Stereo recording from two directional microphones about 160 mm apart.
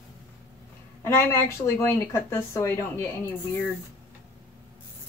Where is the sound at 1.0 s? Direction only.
15° left (ahead or behind).